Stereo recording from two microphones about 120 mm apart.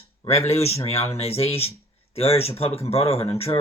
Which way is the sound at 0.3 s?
60° left (ahead or behind).